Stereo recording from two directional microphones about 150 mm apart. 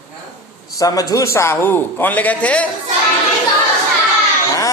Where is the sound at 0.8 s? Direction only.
25° left (ahead or behind); by 2.7 s 10° left (ahead or behind).